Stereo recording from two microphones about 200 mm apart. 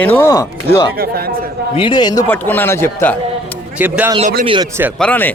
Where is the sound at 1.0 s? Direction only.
50° right (ahead or behind).